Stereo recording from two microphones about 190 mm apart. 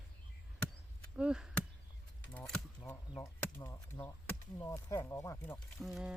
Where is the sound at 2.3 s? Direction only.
5° left (ahead or behind).